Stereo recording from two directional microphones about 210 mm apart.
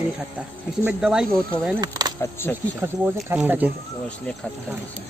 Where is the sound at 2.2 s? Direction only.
10° left (ahead or behind).